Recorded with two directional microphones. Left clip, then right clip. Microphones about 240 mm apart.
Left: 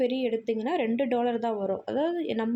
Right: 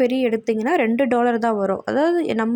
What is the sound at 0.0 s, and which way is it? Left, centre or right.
A woman's voice, centre.